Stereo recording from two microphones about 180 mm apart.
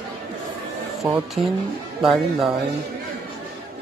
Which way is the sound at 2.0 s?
Centre (ahead or behind).